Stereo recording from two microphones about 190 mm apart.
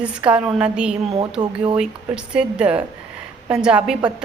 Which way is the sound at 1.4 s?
20° right (ahead or behind).